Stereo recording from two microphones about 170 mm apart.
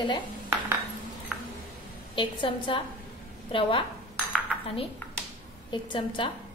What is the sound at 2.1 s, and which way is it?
A woman's voice, 30° left (ahead or behind).